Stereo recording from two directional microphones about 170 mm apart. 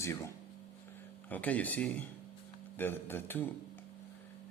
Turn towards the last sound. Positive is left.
turn(degrees=10)  # may be behind; listen again after turning